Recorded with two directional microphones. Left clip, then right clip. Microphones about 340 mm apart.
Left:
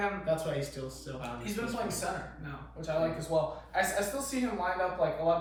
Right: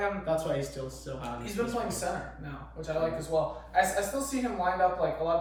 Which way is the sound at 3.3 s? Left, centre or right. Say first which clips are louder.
Right 1 dB; centre.